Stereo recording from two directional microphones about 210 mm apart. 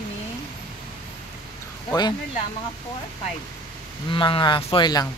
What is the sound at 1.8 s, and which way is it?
Speech, 20° left (ahead or behind).